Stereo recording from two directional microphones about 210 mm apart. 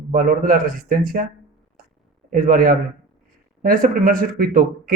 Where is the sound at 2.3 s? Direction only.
40° right (ahead or behind).